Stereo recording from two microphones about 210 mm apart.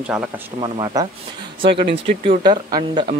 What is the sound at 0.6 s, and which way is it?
Speech, 20° right (ahead or behind).